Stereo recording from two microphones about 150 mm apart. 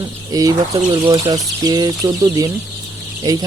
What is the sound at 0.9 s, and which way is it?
Speech, 35° right (ahead or behind).